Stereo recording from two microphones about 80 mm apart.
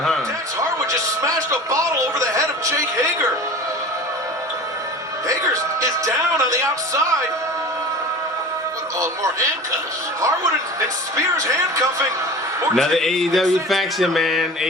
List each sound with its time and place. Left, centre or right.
0.9 s music: right
5.3 s music: right
11.4 s speech: right
12.7 s speech: centre